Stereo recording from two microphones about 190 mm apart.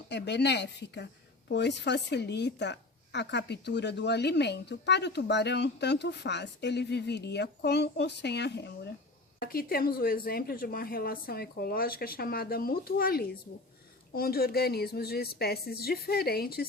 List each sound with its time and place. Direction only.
0.1 s a woman's voice: 65° left (ahead or behind)